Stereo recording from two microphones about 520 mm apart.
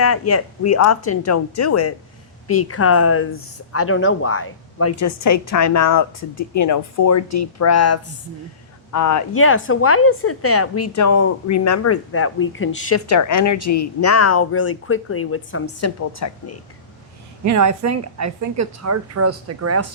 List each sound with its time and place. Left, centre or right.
0.0 s a woman's voice: left
17.4 s a woman's voice: right